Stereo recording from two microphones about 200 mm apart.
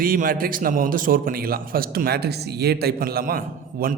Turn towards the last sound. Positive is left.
turn(degrees=-45)  # may be behind; listen again after turning